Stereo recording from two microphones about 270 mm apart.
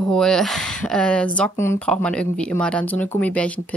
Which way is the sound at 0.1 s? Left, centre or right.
Centre.